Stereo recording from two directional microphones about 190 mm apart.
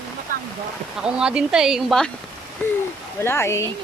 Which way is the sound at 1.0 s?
5° right (ahead or behind).